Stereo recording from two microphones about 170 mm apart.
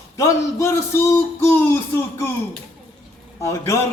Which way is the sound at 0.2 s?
15° left (ahead or behind).